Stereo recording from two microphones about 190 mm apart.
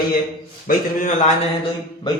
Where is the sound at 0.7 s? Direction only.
40° left (ahead or behind).